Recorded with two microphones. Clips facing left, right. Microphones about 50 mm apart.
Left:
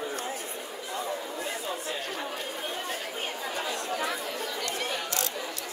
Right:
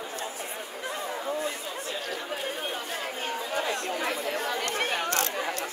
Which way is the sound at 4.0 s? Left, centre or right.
Right.